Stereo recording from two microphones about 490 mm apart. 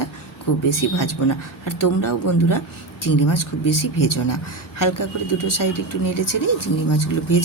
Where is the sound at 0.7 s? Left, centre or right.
Left.